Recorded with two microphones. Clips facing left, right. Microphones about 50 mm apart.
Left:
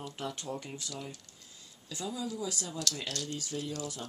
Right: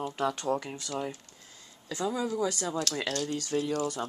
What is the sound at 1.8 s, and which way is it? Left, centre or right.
Speech, right.